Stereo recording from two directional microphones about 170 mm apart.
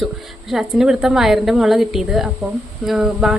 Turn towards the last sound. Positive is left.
turn(degrees=-5)  # may be behind; listen again after turning